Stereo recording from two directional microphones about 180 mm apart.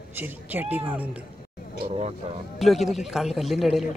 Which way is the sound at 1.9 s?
35° right (ahead or behind).